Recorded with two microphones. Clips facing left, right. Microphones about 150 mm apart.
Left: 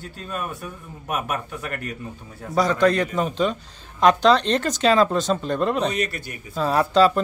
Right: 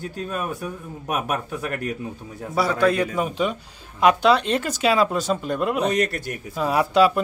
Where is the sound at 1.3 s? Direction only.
40° right (ahead or behind).